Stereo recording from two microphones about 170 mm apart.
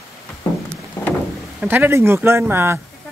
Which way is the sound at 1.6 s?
10° right (ahead or behind).